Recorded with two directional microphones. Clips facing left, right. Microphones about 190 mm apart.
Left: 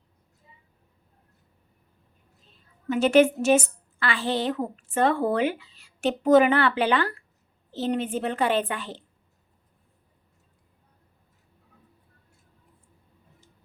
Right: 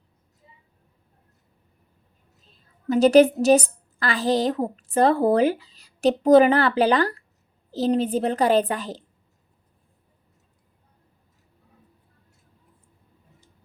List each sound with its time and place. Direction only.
2.9 s a woman's voice: 35° right (ahead or behind)